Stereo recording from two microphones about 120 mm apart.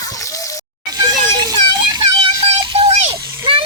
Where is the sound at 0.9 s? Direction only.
30° right (ahead or behind).